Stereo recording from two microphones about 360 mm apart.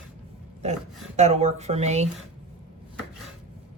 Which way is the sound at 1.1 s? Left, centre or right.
Centre.